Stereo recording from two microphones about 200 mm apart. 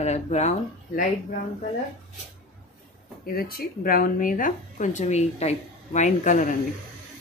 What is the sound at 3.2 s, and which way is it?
A woman's voice, 45° left (ahead or behind).